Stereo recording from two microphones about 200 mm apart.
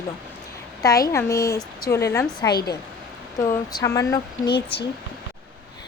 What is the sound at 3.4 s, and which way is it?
Speech, 20° left (ahead or behind).